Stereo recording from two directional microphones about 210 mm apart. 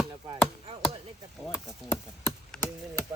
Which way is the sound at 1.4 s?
Centre (ahead or behind).